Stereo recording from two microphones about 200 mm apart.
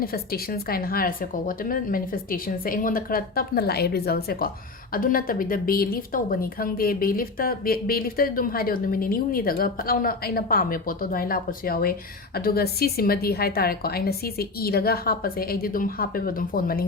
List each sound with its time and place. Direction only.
0.0 s speech: 50° left (ahead or behind)